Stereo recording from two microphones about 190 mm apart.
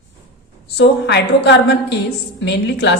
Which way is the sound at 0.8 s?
65° left (ahead or behind).